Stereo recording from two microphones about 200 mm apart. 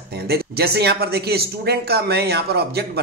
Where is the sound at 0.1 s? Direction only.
50° right (ahead or behind).